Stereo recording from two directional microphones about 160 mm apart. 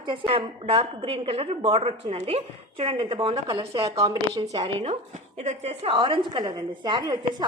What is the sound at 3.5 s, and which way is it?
Speech, 20° right (ahead or behind).